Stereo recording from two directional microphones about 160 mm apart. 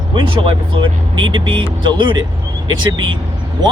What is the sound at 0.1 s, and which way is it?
Speech, 30° right (ahead or behind).